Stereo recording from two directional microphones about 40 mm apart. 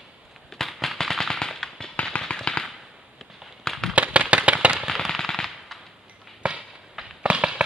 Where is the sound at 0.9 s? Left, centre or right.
Centre.